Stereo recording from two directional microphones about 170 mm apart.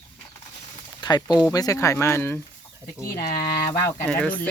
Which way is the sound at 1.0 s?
25° left (ahead or behind).